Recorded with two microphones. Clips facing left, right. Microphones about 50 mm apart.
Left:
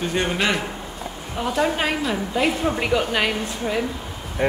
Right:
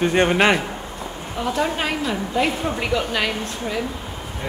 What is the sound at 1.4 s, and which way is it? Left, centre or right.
A woman's voice, centre.